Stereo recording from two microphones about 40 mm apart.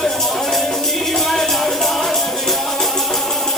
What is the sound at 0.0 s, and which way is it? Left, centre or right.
Music, centre.